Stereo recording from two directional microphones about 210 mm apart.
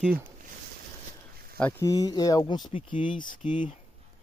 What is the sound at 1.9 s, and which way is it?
Speech, 20° left (ahead or behind).